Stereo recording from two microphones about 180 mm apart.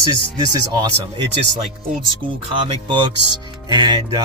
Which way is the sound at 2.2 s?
50° right (ahead or behind).